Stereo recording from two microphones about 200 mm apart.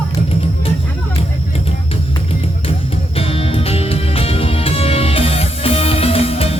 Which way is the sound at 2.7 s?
30° left (ahead or behind).